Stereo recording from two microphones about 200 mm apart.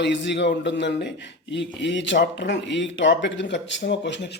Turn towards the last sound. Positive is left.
turn(degrees=60)  # may be behind; listen again after turning